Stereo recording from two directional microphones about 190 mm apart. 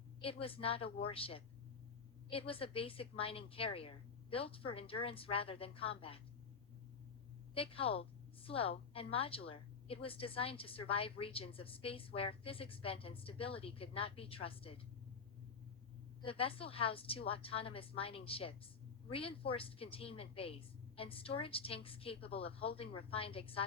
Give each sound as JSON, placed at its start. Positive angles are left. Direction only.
{"t": 0.2, "sound": "a woman's voice", "side_deg": 30}
{"t": 7.5, "sound": "a woman's voice", "side_deg": 30}
{"t": 16.2, "sound": "a woman's voice", "side_deg": 30}